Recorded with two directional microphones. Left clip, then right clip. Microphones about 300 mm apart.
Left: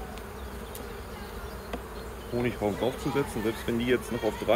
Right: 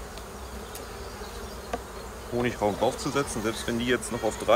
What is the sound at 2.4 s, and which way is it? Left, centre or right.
Speech, centre.